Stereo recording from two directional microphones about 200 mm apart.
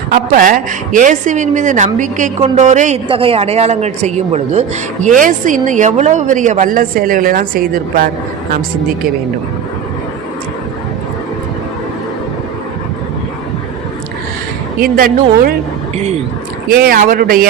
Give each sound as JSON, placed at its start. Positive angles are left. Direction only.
{"t": 0.1, "sound": "speech", "side_deg": -45}
{"t": 14.8, "sound": "a woman's voice", "side_deg": -45}
{"t": 16.6, "sound": "a woman's voice", "side_deg": -45}